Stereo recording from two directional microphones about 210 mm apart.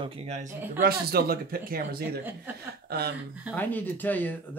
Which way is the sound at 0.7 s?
45° right (ahead or behind).